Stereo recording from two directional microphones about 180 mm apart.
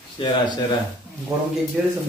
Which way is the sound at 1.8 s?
5° right (ahead or behind).